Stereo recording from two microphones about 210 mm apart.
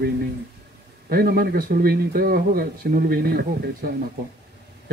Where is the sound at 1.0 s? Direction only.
45° right (ahead or behind).